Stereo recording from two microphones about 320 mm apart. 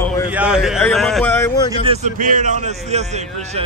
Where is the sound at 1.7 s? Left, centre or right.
Centre.